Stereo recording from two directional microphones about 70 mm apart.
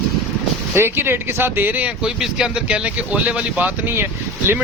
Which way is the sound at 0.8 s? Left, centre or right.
Right.